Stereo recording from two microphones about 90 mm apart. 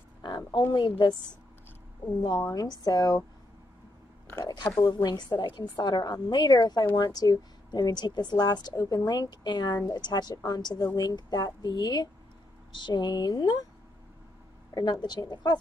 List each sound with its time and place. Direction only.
0.5 s a woman's voice: 50° left (ahead or behind)
2.2 s a woman's voice: 45° left (ahead or behind)
4.8 s a woman's voice: 55° left (ahead or behind)
14.7 s a woman's voice: 50° left (ahead or behind)